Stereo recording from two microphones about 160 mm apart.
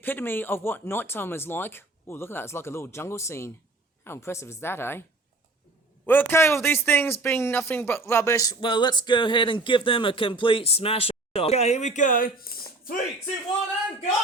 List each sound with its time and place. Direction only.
0.0 s speech: 15° left (ahead or behind)
6.1 s a man's voice: 10° left (ahead or behind); by 13.0 s 65° left (ahead or behind)